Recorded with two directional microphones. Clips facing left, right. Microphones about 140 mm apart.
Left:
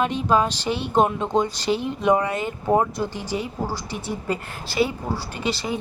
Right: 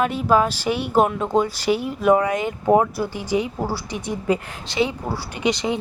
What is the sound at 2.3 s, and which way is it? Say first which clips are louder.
Speech: right 3 dB; 15° right (ahead or behind).